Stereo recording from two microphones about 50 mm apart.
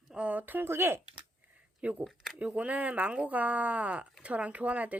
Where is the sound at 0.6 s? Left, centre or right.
Right.